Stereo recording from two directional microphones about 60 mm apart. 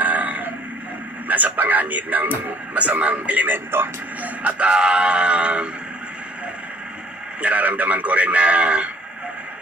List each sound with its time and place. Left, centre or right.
0.0 s a sound: right
1.2 s speech: right
4.4 s speech: right
7.4 s speech: right